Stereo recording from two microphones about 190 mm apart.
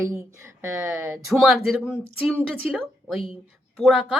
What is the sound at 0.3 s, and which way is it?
A woman's voice, 15° right (ahead or behind).